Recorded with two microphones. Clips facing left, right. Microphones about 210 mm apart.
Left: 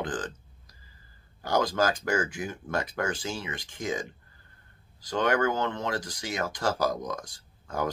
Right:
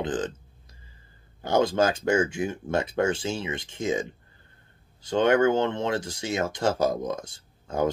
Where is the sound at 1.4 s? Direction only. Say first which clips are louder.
Right 4 dB; 25° right (ahead or behind).